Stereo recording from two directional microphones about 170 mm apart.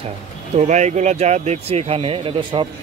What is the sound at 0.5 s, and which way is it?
Speech, 45° right (ahead or behind).